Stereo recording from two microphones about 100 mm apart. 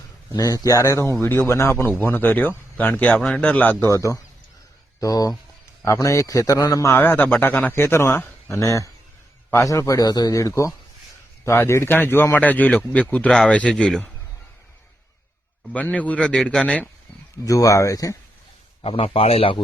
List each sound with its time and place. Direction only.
0.3 s a man's voice: 35° left (ahead or behind); by 3.8 s 15° left (ahead or behind)
3.8 s a man's voice: 30° left (ahead or behind)
6.9 s a man's voice: 20° left (ahead or behind)
15.7 s speech: 15° left (ahead or behind)
17.4 s a man's voice: 35° left (ahead or behind)
18.8 s a man's voice: 65° left (ahead or behind)